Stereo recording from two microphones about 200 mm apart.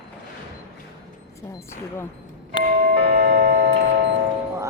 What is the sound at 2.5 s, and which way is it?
Doorbell, 25° left (ahead or behind).